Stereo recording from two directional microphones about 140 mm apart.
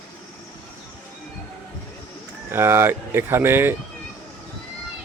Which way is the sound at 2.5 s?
15° right (ahead or behind).